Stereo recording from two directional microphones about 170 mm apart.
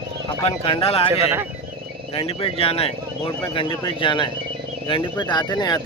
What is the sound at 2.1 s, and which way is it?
Speech, 35° left (ahead or behind).